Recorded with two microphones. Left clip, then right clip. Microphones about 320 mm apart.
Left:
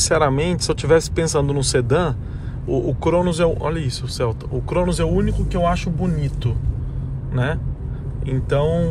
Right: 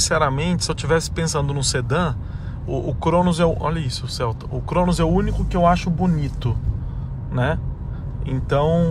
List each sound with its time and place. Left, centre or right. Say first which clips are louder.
0.0 s speech: left 2 dB; centre